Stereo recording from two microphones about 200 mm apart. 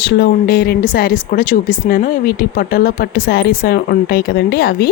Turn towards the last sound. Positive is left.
turn(degrees=50)  # may be behind; listen again after turning